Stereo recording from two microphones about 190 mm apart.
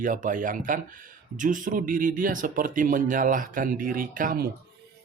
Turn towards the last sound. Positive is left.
turn(degrees=-50)  # may be behind; listen again after turning